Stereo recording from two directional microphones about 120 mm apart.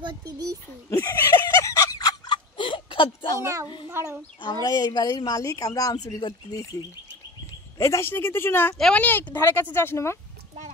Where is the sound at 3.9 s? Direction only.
20° right (ahead or behind).